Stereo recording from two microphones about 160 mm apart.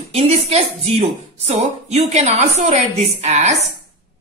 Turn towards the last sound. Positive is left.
turn(degrees=-45)  # may be behind; listen again after turning